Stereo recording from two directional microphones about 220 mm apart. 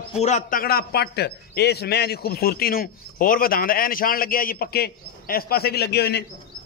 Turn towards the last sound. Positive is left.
turn(degrees=45)  # may be behind; listen again after turning